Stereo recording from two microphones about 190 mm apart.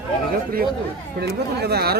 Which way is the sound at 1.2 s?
55° right (ahead or behind).